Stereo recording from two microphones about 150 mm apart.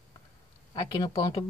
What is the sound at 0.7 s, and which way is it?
Speech, 30° left (ahead or behind).